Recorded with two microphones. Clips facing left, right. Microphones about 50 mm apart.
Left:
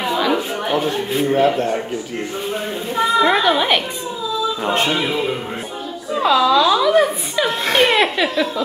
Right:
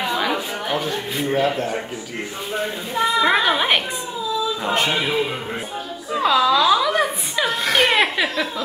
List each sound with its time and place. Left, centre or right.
0.7 s a man's voice: left
3.0 s a woman's voice: centre
6.1 s speech: centre
7.4 s a man's voice: left
7.9 s speech: centre